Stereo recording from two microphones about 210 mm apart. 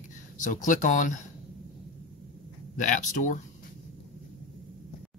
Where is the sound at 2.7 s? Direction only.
35° left (ahead or behind).